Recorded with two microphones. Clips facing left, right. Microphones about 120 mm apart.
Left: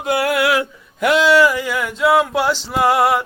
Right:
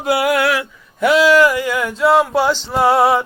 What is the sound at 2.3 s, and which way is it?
Male singing, centre (ahead or behind).